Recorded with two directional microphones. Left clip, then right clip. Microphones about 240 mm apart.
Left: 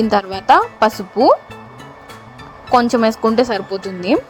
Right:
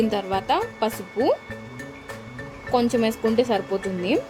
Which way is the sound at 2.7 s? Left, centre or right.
Left.